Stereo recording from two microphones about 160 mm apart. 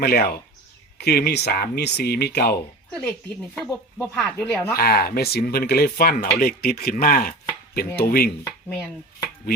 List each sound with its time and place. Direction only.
0.0 s speech: 75° left (ahead or behind)
3.5 s speech: 5° left (ahead or behind)
4.8 s speech: 70° left (ahead or behind)